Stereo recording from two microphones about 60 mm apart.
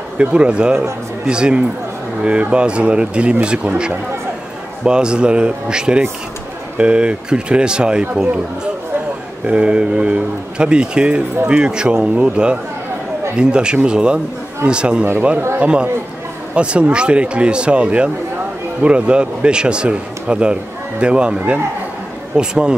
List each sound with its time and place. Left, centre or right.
0.2 s speech: centre
9.5 s speech: centre